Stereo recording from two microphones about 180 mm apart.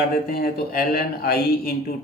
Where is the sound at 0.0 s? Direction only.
55° left (ahead or behind).